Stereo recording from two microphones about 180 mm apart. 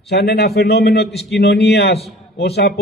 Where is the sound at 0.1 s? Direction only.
65° left (ahead or behind).